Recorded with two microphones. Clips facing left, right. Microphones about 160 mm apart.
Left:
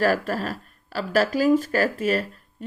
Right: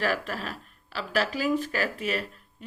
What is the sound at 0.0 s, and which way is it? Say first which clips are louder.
A woman's voice: left 7 dB; 40° left (ahead or behind).